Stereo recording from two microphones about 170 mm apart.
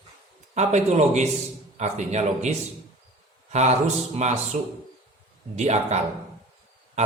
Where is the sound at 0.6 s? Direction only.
40° right (ahead or behind).